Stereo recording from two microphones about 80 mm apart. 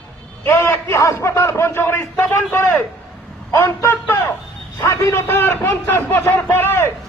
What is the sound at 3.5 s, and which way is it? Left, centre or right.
Vehicle, left.